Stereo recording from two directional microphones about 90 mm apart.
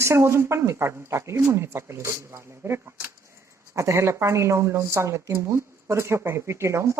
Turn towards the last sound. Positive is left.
turn(degrees=-35)  # may be behind; listen again after turning